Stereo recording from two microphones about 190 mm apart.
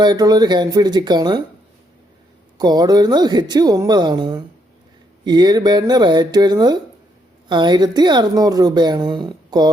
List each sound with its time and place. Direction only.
0.0 s a woman's voice: 20° right (ahead or behind)
2.6 s a woman's voice: 20° right (ahead or behind)